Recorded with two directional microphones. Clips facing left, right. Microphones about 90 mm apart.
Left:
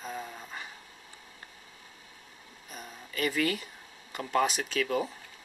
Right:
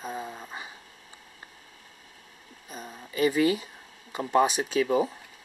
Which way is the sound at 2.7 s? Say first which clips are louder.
Right 4 dB; 20° right (ahead or behind).